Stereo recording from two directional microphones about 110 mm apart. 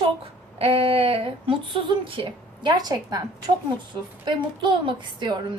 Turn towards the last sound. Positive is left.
turn(degrees=-45)  # may be behind; listen again after turning